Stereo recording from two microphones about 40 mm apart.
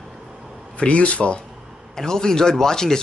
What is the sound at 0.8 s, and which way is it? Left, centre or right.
Speech, left.